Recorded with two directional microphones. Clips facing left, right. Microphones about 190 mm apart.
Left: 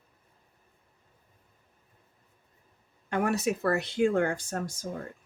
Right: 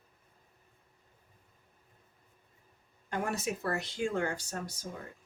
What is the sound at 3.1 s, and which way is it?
Speech, 65° left (ahead or behind).